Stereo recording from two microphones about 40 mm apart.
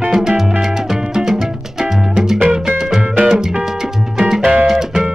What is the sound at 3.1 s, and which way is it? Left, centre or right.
Music, right.